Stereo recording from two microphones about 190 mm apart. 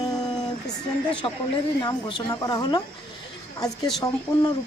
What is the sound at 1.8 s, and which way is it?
Speech, 25° left (ahead or behind).